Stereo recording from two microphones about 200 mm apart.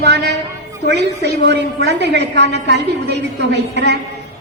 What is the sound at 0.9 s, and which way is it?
A woman's voice, 55° right (ahead or behind).